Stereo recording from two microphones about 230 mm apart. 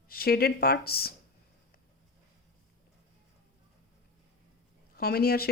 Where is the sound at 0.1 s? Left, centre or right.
Left.